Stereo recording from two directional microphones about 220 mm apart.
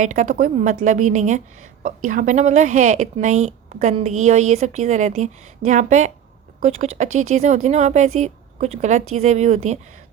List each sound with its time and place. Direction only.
0.0 s a woman's voice: 35° right (ahead or behind)